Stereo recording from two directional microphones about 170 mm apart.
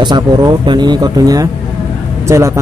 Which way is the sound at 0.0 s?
25° right (ahead or behind).